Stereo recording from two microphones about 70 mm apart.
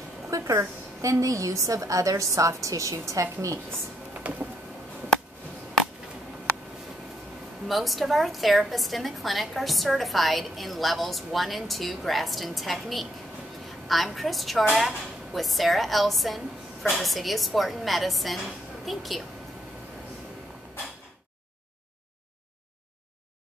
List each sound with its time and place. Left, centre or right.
0.3 s a woman's voice: right
4.2 s a sound: right
7.6 s a woman's voice: centre